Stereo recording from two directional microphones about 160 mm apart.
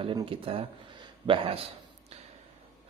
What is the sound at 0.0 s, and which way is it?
Speech, 35° right (ahead or behind).